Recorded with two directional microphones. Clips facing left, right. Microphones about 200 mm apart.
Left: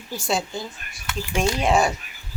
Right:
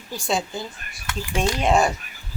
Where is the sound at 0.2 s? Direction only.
Centre (ahead or behind).